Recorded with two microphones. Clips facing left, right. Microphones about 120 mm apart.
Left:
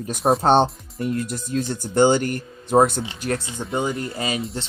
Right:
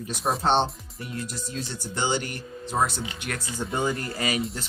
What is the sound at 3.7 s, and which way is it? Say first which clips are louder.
Speech: left 3 dB; 20° left (ahead or behind).